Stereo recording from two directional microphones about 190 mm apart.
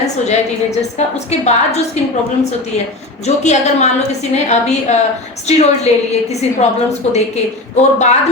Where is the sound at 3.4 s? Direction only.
35° left (ahead or behind).